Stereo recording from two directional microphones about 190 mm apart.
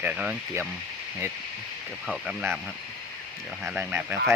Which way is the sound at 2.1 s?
5° right (ahead or behind).